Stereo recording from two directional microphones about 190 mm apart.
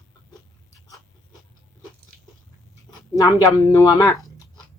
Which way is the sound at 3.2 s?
15° left (ahead or behind).